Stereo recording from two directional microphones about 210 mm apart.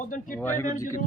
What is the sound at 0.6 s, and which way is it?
Speech, 40° left (ahead or behind).